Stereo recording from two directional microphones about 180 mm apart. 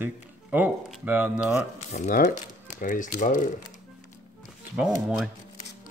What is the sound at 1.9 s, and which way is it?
Speech, 45° left (ahead or behind).